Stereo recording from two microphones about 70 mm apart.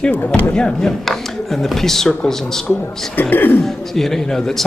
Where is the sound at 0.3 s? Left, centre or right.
Centre.